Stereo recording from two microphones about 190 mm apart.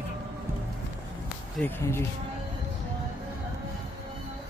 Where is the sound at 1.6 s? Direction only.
10° left (ahead or behind).